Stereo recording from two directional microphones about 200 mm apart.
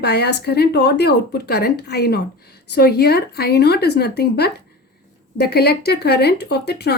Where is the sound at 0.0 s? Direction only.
55° left (ahead or behind).